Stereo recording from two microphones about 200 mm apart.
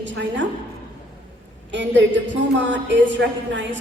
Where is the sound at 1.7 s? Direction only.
65° right (ahead or behind).